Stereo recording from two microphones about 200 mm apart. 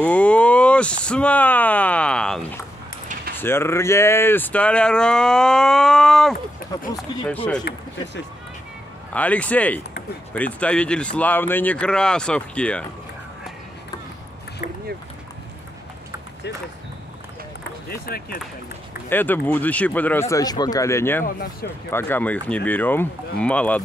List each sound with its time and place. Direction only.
0.0 s speech: 5° left (ahead or behind)
7.7 s a sound: 50° left (ahead or behind)
9.1 s speech: 5° left (ahead or behind)
17.8 s speech: 50° left (ahead or behind)
19.0 s speech: 10° left (ahead or behind)